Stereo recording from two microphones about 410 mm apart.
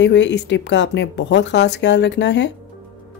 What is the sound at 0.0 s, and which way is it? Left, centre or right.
Speech, left.